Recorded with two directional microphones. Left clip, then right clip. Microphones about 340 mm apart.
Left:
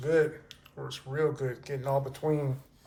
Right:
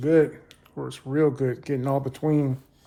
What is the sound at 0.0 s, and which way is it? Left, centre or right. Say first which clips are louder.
Speech: right 6 dB; right.